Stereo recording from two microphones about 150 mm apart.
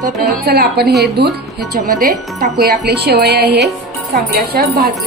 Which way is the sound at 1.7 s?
75° right (ahead or behind).